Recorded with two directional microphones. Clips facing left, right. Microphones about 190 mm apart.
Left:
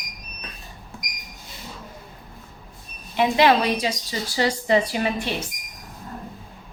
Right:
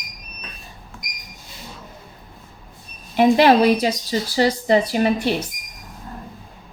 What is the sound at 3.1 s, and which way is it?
A woman's voice, 40° right (ahead or behind).